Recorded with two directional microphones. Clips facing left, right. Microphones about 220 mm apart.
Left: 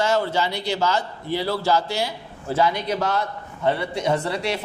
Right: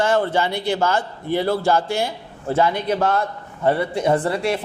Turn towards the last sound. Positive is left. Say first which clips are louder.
# right 4 dB
turn(degrees=-50)  # may be behind; listen again after turning